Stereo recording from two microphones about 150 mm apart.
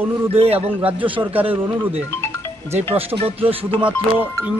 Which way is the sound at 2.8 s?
40° right (ahead or behind).